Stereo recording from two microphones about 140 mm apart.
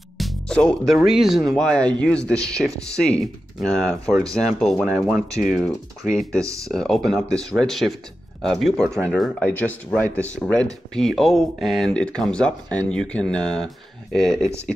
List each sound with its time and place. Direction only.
0.2 s speech: 5° left (ahead or behind)
6.7 s speech: 5° left (ahead or behind)